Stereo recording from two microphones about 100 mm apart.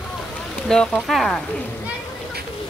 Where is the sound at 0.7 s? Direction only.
5° left (ahead or behind).